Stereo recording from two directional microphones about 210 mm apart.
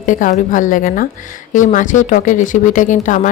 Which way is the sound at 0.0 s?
35° left (ahead or behind).